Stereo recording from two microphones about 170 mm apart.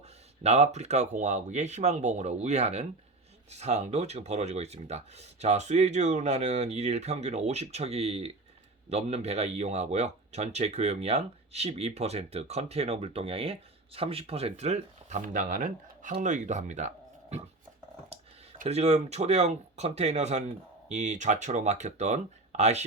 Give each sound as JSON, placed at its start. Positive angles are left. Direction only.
{"t": 0.4, "sound": "speech", "side_deg": -40}
{"t": 18.5, "sound": "speech", "side_deg": -45}